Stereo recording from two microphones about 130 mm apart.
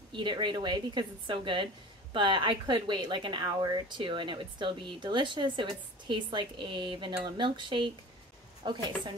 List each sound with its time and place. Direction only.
0.1 s speech: 35° right (ahead or behind)